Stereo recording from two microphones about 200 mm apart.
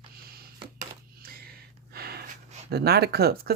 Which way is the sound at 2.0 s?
50° right (ahead or behind).